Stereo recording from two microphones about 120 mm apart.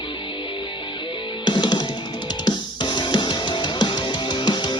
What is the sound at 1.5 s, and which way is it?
Music, 40° left (ahead or behind).